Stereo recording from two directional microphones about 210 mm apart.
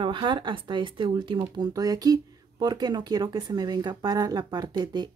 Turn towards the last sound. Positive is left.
turn(degrees=-20)  # may be behind; listen again after turning